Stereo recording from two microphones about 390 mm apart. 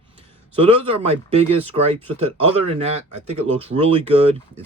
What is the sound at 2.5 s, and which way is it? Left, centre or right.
Speech, centre.